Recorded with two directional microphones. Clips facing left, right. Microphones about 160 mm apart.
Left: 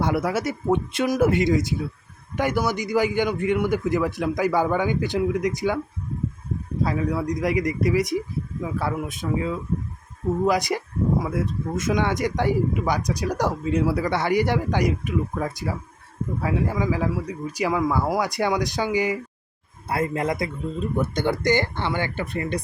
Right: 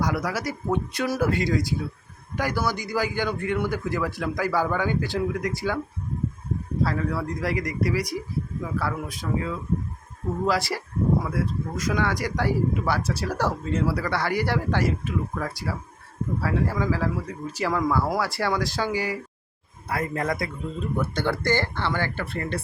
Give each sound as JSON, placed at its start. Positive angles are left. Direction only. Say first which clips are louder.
{"t": 0.0, "sound": "speech", "louder": "left 3 dB", "side_deg": 25}
{"t": 6.8, "sound": "speech", "louder": "left 3 dB", "side_deg": 15}